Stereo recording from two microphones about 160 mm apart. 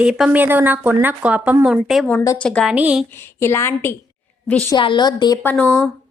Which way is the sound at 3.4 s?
15° left (ahead or behind).